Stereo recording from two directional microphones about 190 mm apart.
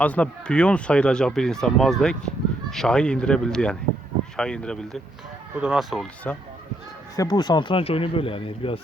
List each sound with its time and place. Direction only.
0.0 s speech: 5° left (ahead or behind)
7.2 s speech: 20° left (ahead or behind)